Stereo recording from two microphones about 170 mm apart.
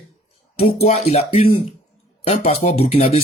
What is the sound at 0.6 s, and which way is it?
Speech, 35° left (ahead or behind).